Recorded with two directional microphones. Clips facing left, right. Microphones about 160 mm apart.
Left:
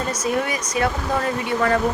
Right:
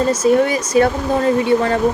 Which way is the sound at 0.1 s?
30° right (ahead or behind).